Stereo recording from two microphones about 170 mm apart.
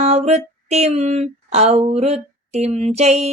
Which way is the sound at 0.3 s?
40° right (ahead or behind).